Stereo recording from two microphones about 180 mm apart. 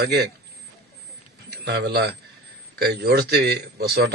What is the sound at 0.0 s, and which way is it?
Speech, 65° right (ahead or behind).